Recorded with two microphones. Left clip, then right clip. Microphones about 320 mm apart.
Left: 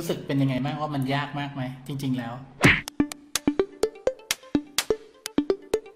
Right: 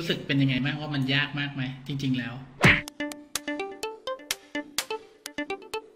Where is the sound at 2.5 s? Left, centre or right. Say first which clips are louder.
Left 1 dB; centre.